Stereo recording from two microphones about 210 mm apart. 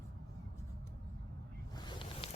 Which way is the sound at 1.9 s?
25° left (ahead or behind).